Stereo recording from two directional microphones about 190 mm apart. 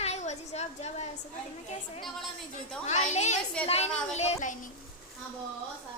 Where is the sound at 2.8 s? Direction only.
35° left (ahead or behind).